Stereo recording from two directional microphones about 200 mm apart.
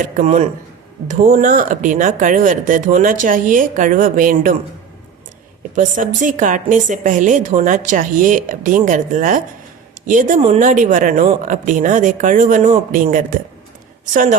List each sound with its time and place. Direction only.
0.0 s a woman's voice: 35° right (ahead or behind)
5.7 s a woman's voice: 40° right (ahead or behind)